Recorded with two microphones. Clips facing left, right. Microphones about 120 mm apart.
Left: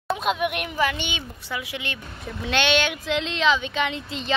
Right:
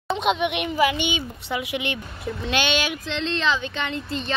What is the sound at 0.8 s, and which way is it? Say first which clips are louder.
Speech: right 4 dB; 10° right (ahead or behind).